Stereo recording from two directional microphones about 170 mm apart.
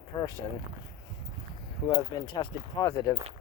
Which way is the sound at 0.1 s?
25° left (ahead or behind).